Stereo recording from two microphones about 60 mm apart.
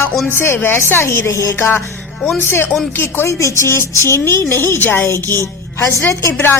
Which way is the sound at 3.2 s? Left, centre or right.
Left.